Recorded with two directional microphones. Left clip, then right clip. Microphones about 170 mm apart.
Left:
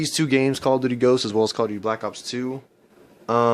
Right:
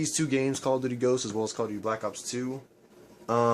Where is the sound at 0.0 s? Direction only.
55° left (ahead or behind).